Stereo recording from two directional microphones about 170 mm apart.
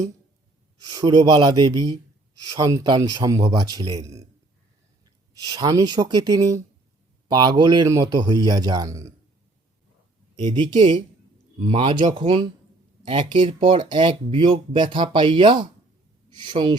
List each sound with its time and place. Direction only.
0.8 s speech: 20° right (ahead or behind)
5.4 s speech: 25° right (ahead or behind)
10.3 s speech: 25° right (ahead or behind)